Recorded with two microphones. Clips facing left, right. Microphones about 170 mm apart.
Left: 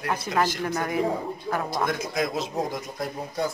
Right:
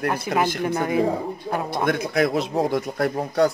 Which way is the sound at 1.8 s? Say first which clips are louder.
Right 6 dB; 60° right (ahead or behind).